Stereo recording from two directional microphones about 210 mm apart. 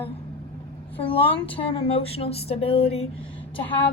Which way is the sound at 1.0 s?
5° left (ahead or behind).